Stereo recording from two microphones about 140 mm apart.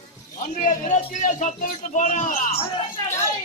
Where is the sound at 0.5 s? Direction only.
60° left (ahead or behind).